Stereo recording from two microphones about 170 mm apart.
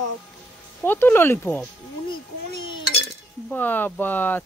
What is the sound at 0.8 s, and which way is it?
Speech, 10° left (ahead or behind).